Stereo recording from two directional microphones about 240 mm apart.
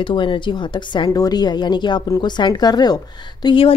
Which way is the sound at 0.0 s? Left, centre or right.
Left.